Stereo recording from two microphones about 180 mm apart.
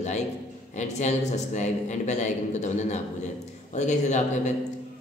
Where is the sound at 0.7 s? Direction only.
40° left (ahead or behind).